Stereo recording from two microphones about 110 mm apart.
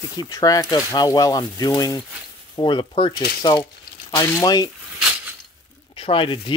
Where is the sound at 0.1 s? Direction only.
35° left (ahead or behind).